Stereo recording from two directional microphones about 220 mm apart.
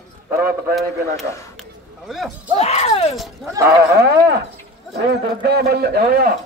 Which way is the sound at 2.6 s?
30° left (ahead or behind).